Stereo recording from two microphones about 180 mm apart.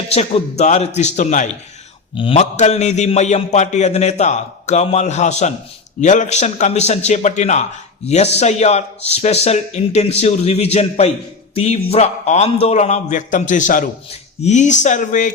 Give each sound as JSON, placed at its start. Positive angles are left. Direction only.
{"t": 0.1, "sound": "a man's voice", "side_deg": 35}
{"t": 2.1, "sound": "a man's voice", "side_deg": 30}